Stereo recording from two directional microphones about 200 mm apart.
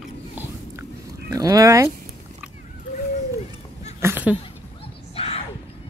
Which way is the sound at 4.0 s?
10° right (ahead or behind).